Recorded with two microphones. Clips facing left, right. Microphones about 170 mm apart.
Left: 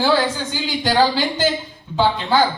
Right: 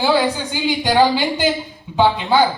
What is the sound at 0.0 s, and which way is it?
A woman's voice, 15° right (ahead or behind).